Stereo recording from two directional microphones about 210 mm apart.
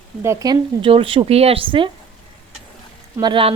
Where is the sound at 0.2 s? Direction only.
15° right (ahead or behind).